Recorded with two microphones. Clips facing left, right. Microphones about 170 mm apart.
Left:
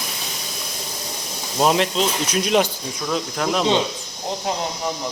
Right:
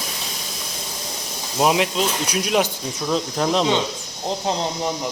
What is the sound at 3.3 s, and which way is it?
Speech, 25° right (ahead or behind).